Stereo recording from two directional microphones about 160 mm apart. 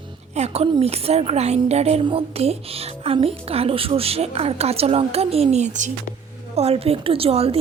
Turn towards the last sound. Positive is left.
turn(degrees=-40)  # may be behind; listen again after turning